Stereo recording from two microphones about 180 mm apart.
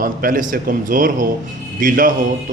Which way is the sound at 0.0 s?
50° right (ahead or behind).